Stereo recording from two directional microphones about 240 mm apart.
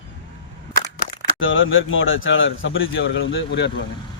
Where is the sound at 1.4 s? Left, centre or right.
Left.